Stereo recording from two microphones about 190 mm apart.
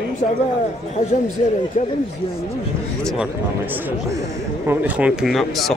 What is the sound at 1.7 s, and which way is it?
Speech, 40° left (ahead or behind).